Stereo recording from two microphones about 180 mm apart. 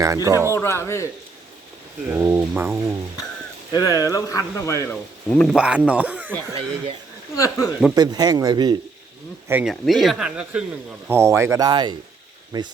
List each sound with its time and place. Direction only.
0.0 s speech: 15° right (ahead or behind)
0.5 s speech: 15° left (ahead or behind)
2.0 s speech: 10° right (ahead or behind)
3.7 s speech: 20° left (ahead or behind)
5.5 s speech: 5° right (ahead or behind)
7.3 s speech: 20° left (ahead or behind)
7.9 s speech: 20° right (ahead or behind)
9.5 s speech: 5° right (ahead or behind); by 12.7 s 25° right (ahead or behind)